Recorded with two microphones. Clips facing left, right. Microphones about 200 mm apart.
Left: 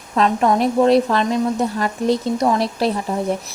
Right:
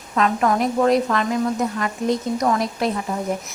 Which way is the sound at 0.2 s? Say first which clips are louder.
Left 3 dB; 30° left (ahead or behind).